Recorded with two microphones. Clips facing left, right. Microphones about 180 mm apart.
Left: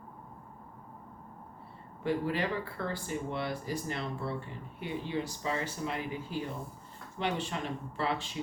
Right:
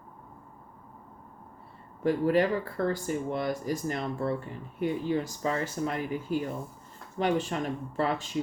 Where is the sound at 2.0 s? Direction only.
45° right (ahead or behind).